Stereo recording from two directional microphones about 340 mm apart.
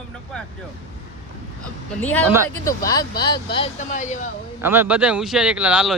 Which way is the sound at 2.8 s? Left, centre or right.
Centre.